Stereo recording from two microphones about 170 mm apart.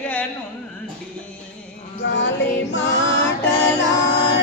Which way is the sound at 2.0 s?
90° left.